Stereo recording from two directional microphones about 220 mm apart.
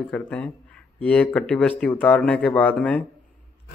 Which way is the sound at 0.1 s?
5° left (ahead or behind).